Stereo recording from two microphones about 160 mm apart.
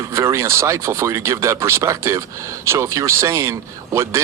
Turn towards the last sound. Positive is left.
turn(degrees=-15)  # may be behind; listen again after turning